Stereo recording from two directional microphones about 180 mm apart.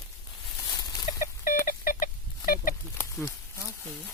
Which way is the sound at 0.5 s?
20° left (ahead or behind).